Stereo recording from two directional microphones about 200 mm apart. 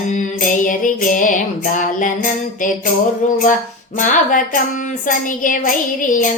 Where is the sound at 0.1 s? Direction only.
40° left (ahead or behind).